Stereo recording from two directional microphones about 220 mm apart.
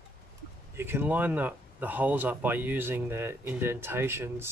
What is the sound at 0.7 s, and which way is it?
Speech, 10° right (ahead or behind).